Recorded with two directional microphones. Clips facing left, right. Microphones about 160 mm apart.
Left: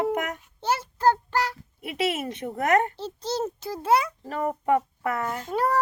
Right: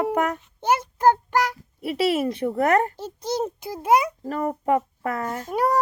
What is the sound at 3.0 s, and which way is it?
A child's voice, 10° right (ahead or behind).